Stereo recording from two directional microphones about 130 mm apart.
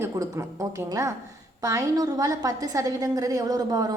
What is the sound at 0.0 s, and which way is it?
Speech, 25° right (ahead or behind).